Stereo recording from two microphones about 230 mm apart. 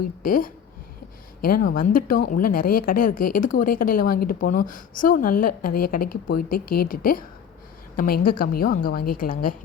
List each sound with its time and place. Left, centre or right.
0.2 s a woman's voice: left